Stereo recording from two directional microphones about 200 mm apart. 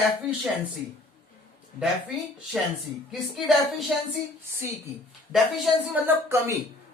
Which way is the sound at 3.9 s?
Centre (ahead or behind).